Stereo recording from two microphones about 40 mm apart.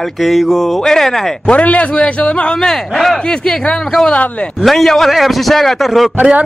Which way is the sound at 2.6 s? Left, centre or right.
Centre.